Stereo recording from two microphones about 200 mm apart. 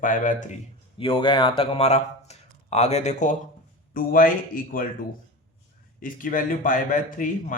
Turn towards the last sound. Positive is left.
turn(degrees=40)  # may be behind; listen again after turning